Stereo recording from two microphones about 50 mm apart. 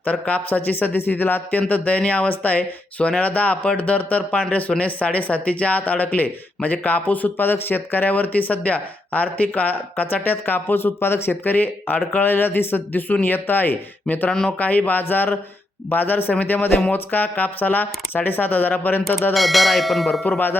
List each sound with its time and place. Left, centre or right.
0.0 s speech: left
15.0 s speech: left
19.3 s bell: centre